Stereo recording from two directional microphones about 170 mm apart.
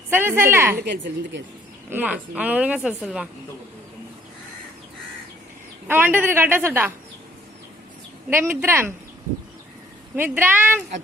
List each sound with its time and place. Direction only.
0.1 s a woman's voice: 15° right (ahead or behind)
0.8 s a woman's voice: 90° right
1.9 s a woman's voice: 10° right (ahead or behind)
5.9 s a woman's voice: 10° right (ahead or behind)
8.3 s a woman's voice: 15° right (ahead or behind)
10.2 s a woman's voice: 10° right (ahead or behind)